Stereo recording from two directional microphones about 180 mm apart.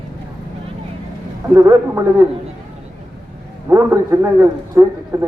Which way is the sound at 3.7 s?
15° right (ahead or behind).